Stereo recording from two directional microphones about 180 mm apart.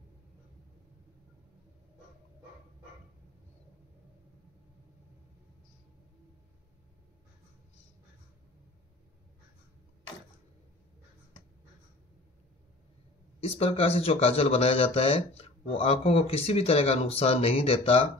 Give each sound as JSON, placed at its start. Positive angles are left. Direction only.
{"t": 13.4, "sound": "speech", "side_deg": 35}